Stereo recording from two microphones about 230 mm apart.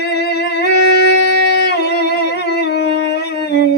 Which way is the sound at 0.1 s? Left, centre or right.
Left.